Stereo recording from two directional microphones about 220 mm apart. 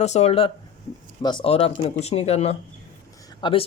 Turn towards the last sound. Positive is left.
turn(degrees=20)  # may be behind; listen again after turning